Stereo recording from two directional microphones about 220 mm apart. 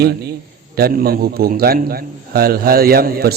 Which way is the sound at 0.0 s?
45° right (ahead or behind).